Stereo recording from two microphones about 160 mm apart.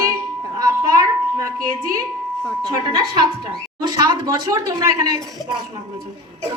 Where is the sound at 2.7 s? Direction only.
25° right (ahead or behind).